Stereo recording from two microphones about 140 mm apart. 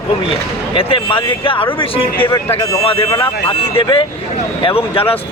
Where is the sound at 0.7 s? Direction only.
40° left (ahead or behind).